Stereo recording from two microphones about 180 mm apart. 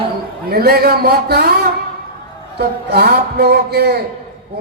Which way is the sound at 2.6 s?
65° right (ahead or behind).